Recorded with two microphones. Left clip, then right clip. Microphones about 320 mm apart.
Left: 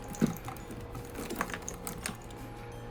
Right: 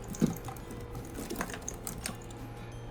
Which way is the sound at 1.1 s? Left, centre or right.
Centre.